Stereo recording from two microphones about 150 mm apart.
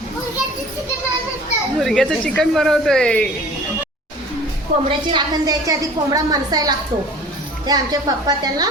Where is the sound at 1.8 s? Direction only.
Centre (ahead or behind).